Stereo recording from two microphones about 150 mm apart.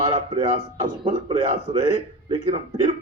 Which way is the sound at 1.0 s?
35° right (ahead or behind).